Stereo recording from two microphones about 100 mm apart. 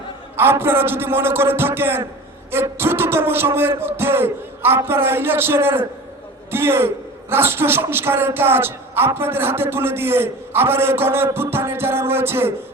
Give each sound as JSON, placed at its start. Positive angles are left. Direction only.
{"t": 0.3, "sound": "a man's voice", "side_deg": -25}